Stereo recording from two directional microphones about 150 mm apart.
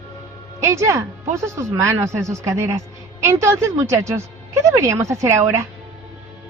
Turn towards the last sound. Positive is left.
turn(degrees=-20)  # may be behind; listen again after turning